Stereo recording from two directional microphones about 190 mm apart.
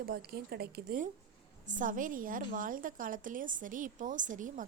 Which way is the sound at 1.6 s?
45° right (ahead or behind).